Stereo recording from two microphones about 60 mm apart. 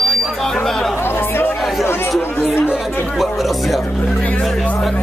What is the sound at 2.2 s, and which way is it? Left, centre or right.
Chatter, left.